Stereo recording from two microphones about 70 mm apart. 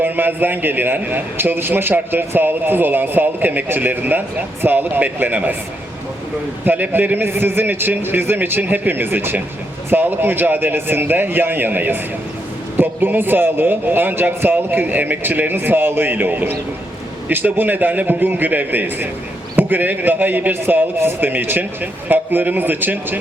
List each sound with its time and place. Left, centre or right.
0.0 s a man's voice: right
6.7 s a man's voice: right